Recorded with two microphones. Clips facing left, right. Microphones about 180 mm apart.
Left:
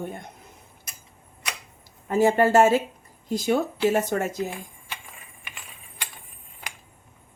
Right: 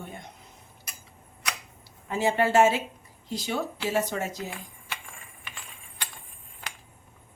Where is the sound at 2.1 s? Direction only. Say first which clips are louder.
Left 5 dB; 45° left (ahead or behind).